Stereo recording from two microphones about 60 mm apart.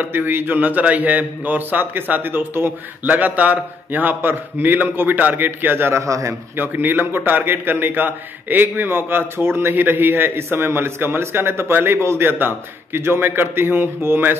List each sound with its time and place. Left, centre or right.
0.0 s a man's voice: right
6.0 s a man's voice: right
6.5 s a man's voice: right